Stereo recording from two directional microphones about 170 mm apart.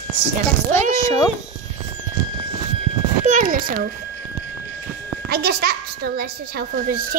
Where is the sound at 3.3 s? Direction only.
45° right (ahead or behind).